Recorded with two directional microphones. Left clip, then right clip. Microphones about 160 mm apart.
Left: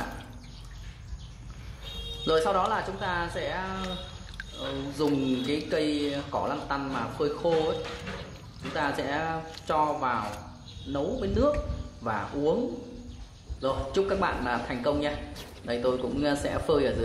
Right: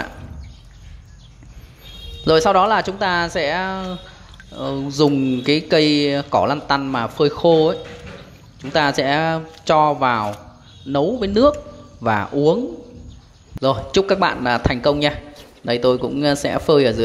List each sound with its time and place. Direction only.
2.2 s speech: 45° right (ahead or behind)
5.0 s speech: 40° right (ahead or behind)
8.7 s speech: 50° right (ahead or behind)
13.6 s speech: 45° right (ahead or behind)